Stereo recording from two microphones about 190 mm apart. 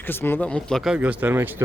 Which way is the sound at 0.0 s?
10° left (ahead or behind).